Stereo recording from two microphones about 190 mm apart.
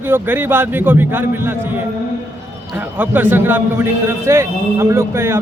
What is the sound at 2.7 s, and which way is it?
A man's voice, 10° right (ahead or behind).